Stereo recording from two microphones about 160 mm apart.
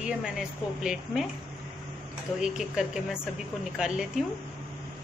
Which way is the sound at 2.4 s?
5° right (ahead or behind).